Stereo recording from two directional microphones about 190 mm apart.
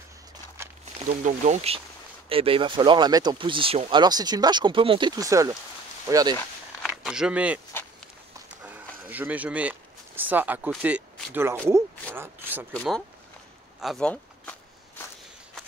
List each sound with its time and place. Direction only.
1.0 s speech: 40° right (ahead or behind); by 6.3 s 20° right (ahead or behind)
6.9 s speech: 5° right (ahead or behind)
9.1 s speech: 10° right (ahead or behind)
12.7 s speech: 5° left (ahead or behind)